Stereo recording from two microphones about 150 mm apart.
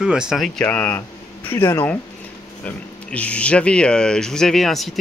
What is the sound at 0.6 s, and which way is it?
Speech, 10° left (ahead or behind).